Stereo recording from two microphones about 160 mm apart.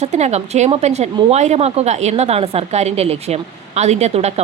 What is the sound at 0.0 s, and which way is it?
A woman's voice, 45° right (ahead or behind).